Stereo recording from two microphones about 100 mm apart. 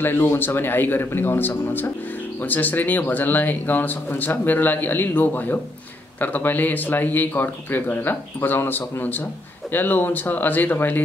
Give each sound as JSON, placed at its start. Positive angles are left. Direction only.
{"t": 0.0, "sound": "speech", "side_deg": 20}